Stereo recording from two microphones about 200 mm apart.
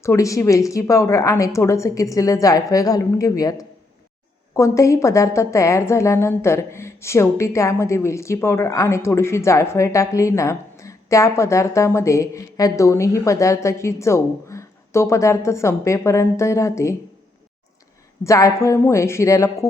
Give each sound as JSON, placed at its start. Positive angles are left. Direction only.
{"t": 0.0, "sound": "a woman's voice", "side_deg": 15}
{"t": 18.2, "sound": "a woman's voice", "side_deg": 15}